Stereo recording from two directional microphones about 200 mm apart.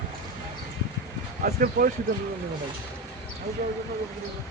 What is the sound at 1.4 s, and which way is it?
Speech, 45° right (ahead or behind).